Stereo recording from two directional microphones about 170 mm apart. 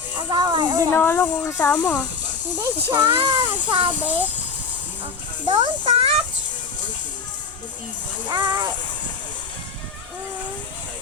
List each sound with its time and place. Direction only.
0.2 s music: 25° right (ahead or behind)
0.9 s speech: 10° left (ahead or behind)
3.1 s a child's voice: 30° right (ahead or behind)
4.0 s a child's voice: 10° right (ahead or behind)
5.5 s a child's voice: 30° right (ahead or behind)
8.3 s a child's voice: 25° right (ahead or behind)